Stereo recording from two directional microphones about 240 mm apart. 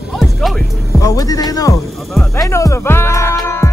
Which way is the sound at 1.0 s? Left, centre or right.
Centre.